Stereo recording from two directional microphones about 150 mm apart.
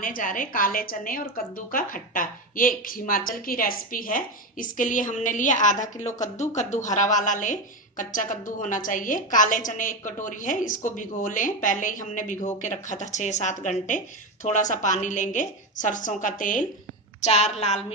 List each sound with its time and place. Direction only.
0.0 s a woman's voice: 65° left (ahead or behind)
17.2 s a woman's voice: 45° left (ahead or behind)